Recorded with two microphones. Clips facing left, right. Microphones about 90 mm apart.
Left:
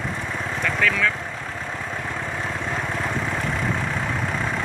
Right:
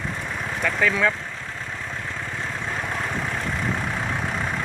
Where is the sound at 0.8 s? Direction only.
20° right (ahead or behind).